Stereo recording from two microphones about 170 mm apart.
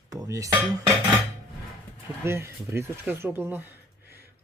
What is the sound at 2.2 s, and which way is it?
Speech, 15° right (ahead or behind).